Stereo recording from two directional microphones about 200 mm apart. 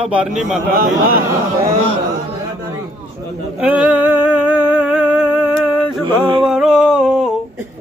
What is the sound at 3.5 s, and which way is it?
Music, 5° right (ahead or behind).